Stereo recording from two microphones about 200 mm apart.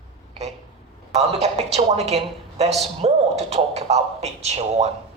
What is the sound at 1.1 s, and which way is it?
Speech, 30° right (ahead or behind).